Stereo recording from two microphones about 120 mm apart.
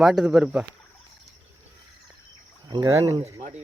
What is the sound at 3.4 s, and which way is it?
Speech, 75° right (ahead or behind).